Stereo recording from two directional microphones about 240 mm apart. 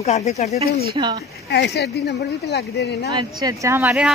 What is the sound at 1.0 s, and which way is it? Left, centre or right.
Speech, right.